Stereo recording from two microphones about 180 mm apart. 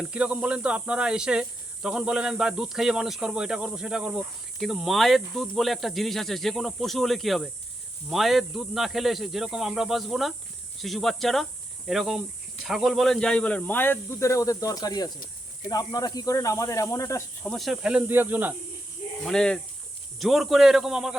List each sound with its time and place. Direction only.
0.0 s speech: 5° right (ahead or behind); by 17.5 s 15° left (ahead or behind)
17.5 s speech: centre (ahead or behind)
19.2 s speech: 5° left (ahead or behind)